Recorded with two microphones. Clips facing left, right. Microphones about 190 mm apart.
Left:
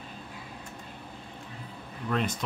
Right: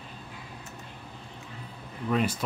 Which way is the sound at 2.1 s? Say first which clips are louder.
Right 3 dB; 5° right (ahead or behind).